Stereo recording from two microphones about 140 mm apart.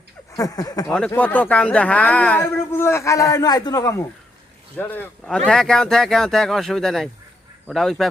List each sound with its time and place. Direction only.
0.3 s speech: 25° left (ahead or behind)
0.9 s speech: 10° left (ahead or behind)